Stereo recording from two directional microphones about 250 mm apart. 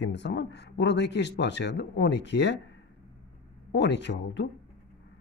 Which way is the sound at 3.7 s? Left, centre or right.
Left.